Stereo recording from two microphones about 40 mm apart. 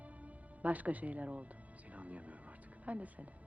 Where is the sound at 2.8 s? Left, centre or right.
Right.